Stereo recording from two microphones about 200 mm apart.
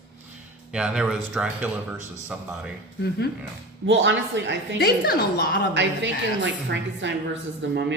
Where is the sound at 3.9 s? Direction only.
65° right (ahead or behind).